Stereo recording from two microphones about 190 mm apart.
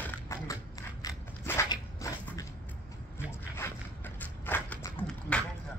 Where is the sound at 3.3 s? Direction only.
15° left (ahead or behind).